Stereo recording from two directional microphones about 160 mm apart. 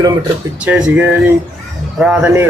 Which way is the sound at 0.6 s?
10° right (ahead or behind).